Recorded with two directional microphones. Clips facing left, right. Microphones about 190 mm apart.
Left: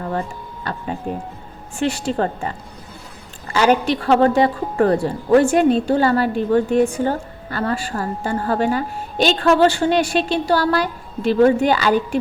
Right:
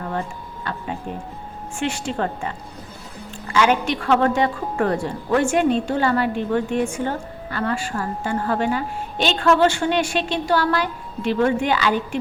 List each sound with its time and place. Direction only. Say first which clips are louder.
0.6 s speech: left 3 dB; 40° left (ahead or behind)
3.5 s speech: left 3 dB; 40° left (ahead or behind)